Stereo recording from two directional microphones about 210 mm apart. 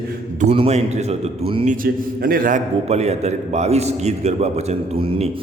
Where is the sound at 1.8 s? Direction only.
45° right (ahead or behind).